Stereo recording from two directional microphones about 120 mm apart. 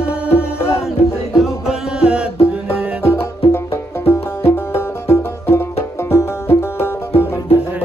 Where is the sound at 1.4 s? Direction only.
5° right (ahead or behind).